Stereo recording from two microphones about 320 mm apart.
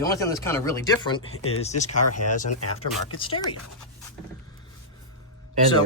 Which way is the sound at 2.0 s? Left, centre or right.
Left.